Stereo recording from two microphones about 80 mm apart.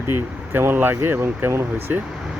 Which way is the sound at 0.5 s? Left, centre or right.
Right.